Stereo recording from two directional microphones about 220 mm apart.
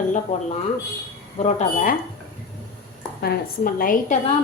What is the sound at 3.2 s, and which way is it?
Speech, 45° left (ahead or behind).